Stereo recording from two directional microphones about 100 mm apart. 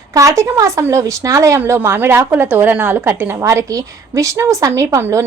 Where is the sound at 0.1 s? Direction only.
35° right (ahead or behind).